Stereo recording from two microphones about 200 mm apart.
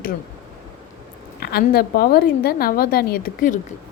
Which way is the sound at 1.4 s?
50° left (ahead or behind).